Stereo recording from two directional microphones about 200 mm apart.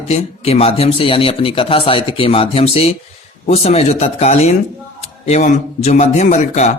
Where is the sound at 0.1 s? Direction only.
30° left (ahead or behind).